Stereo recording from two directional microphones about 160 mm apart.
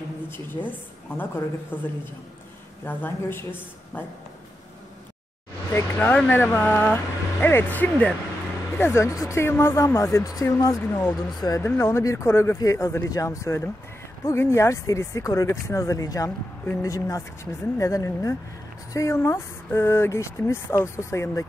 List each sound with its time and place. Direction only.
0.3 s speech: 10° left (ahead or behind)
2.8 s speech: 10° left (ahead or behind)
5.7 s speech: 10° left (ahead or behind)